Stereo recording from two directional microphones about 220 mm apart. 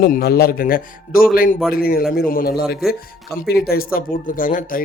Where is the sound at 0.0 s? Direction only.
45° left (ahead or behind).